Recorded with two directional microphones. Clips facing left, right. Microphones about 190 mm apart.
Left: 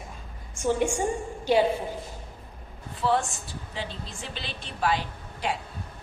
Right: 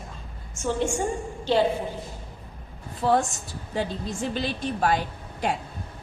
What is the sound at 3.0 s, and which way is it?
A woman's voice, 45° right (ahead or behind).